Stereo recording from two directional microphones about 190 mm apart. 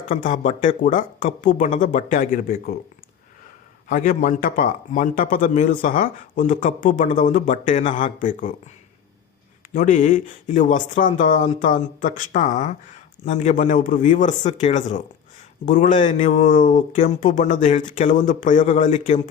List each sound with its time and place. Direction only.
0.1 s speech: 40° left (ahead or behind)
3.8 s speech: 45° left (ahead or behind)
9.7 s speech: 45° left (ahead or behind)